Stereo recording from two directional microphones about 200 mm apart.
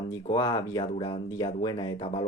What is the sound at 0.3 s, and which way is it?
Speech, 20° left (ahead or behind).